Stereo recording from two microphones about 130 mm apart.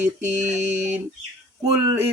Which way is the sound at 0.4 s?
65° right (ahead or behind).